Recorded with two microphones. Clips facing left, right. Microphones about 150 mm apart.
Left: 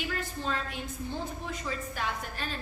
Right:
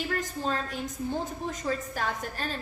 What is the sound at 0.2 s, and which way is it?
A woman's voice, 40° right (ahead or behind).